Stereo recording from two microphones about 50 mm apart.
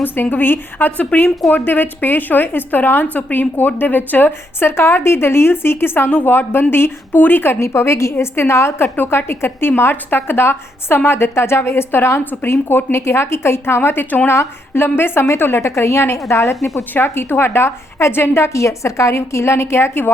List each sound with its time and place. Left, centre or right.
0.0 s a woman's voice: left
7.6 s a woman's voice: left
12.2 s a woman's voice: left
12.5 s a woman's voice: left
16.9 s a woman's voice: left
18.4 s a woman's voice: left